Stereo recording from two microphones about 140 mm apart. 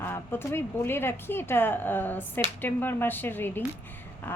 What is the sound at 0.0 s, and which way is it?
A woman's voice, 15° left (ahead or behind).